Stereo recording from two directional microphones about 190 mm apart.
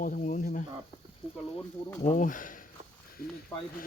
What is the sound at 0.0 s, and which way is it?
Speech, 40° left (ahead or behind).